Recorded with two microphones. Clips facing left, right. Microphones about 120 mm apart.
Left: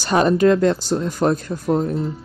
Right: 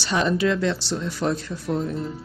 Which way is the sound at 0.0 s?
45° left (ahead or behind).